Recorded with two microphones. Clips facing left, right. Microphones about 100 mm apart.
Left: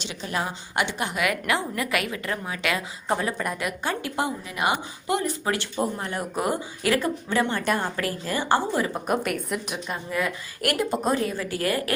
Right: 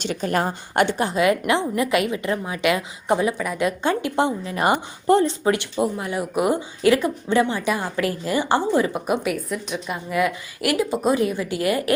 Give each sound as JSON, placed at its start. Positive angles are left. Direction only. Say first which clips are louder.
{"t": 0.0, "sound": "a woman's voice", "louder": "right 7 dB", "side_deg": -50}
{"t": 3.3, "sound": "a woman's voice", "louder": "right 2 dB", "side_deg": 0}
{"t": 3.6, "sound": "a woman's voice", "louder": "right 7 dB", "side_deg": -25}
{"t": 5.2, "sound": "a woman's voice", "louder": "right 6 dB", "side_deg": -25}
{"t": 5.8, "sound": "speech", "louder": "right 4 dB", "side_deg": -10}
{"t": 7.4, "sound": "a woman's voice", "louder": "right 1 dB", "side_deg": -5}
{"t": 7.9, "sound": "a woman's voice", "louder": "right 5 dB", "side_deg": -20}
{"t": 9.0, "sound": "a woman's voice", "louder": "right 2 dB", "side_deg": -5}
{"t": 9.9, "sound": "speech", "louder": "right 5 dB", "side_deg": -15}
{"t": 10.6, "sound": "a woman's voice", "louder": "right 3 dB", "side_deg": -5}
{"t": 11.1, "sound": "a woman's voice", "louder": "right 4 dB", "side_deg": -20}